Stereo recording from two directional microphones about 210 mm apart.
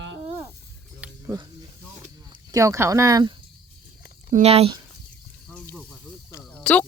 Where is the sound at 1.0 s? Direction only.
15° right (ahead or behind).